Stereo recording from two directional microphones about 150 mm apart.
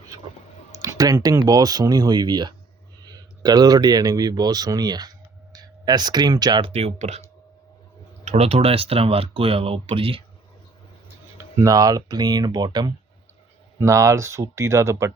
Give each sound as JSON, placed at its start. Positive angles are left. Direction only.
{"t": 0.8, "sound": "speech", "side_deg": -25}
{"t": 6.7, "sound": "speech", "side_deg": -45}
{"t": 11.6, "sound": "speech", "side_deg": -25}